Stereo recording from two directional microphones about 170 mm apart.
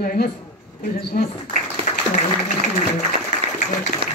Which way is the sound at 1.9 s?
40° left (ahead or behind).